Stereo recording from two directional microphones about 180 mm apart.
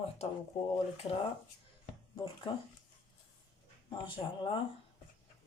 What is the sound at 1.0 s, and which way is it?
Speech, 30° left (ahead or behind).